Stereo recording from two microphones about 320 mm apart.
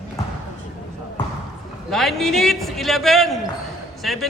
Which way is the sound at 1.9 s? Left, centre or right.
Centre.